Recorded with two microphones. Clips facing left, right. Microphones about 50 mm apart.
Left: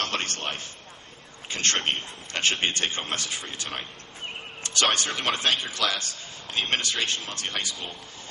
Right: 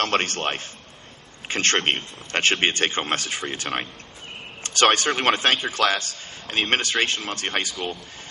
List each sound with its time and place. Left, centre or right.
0.3 s a man's voice: right
1.5 s a man's voice: right